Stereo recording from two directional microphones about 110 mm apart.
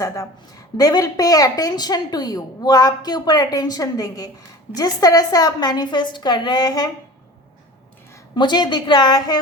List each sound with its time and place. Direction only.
0.8 s speech: 35° left (ahead or behind)
8.4 s speech: 40° left (ahead or behind)